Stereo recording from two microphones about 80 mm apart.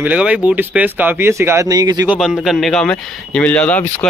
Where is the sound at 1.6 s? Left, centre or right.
Right.